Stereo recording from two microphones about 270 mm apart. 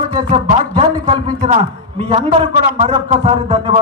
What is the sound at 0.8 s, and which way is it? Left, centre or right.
Speech, centre.